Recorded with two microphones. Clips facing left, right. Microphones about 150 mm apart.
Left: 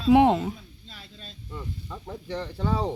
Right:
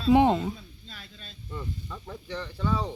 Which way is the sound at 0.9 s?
25° left (ahead or behind).